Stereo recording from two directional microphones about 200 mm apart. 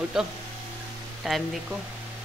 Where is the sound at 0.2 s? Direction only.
5° right (ahead or behind).